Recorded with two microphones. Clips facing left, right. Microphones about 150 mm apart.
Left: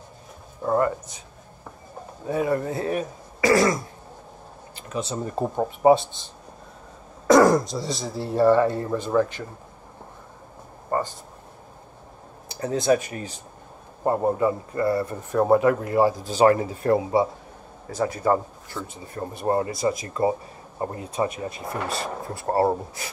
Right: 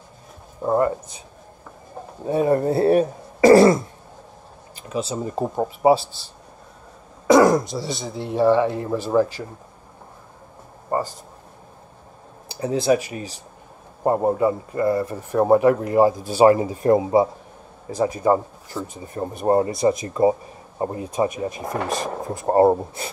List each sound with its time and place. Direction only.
0.6 s speech: 20° right (ahead or behind)
2.2 s speech: 30° right (ahead or behind)
5.3 s speech: 5° right (ahead or behind)
7.2 s speech: centre (ahead or behind)
10.9 s a sound: 10° right (ahead or behind)
12.8 s a man's voice: 15° right (ahead or behind)